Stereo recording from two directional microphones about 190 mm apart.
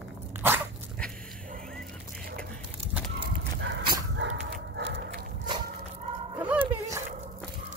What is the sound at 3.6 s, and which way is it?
Dog, 65° right (ahead or behind).